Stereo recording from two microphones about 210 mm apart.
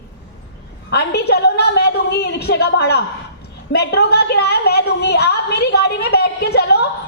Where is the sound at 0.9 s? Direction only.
50° left (ahead or behind).